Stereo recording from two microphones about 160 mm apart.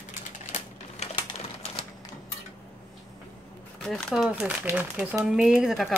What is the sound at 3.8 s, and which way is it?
Speech, centre (ahead or behind).